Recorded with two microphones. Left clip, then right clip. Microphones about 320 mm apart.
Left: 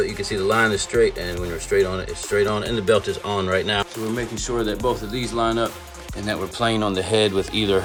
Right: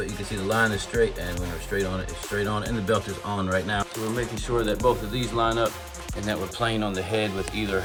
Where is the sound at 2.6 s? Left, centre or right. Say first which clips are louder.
Left 6 dB; centre.